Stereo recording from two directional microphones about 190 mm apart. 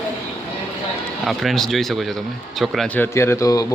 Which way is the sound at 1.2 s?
Centre (ahead or behind).